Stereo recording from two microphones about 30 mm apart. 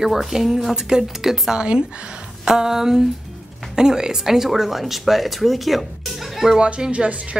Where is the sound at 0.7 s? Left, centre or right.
Right.